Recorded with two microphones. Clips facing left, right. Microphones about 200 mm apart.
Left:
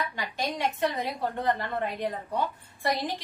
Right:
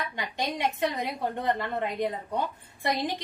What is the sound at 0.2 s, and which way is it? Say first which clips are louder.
Speech: right 2 dB; 20° right (ahead or behind).